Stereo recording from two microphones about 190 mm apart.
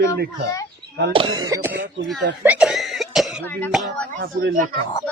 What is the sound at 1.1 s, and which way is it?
Cough, 25° right (ahead or behind).